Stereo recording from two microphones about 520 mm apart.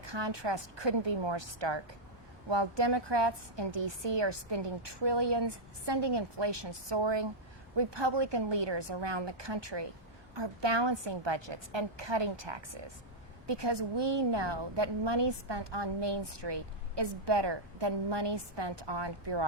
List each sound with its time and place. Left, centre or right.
0.0 s a woman's voice: right